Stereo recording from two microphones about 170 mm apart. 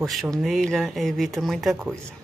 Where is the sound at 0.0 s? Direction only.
Centre (ahead or behind).